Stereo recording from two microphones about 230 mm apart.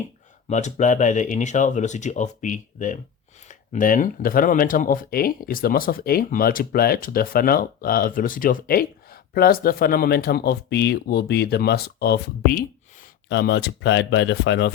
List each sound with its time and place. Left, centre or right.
0.4 s speech: left